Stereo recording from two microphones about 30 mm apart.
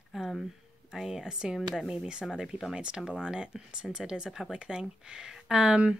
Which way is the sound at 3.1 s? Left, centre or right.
Right.